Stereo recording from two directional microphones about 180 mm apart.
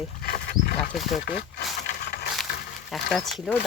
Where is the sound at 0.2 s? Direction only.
55° left (ahead or behind).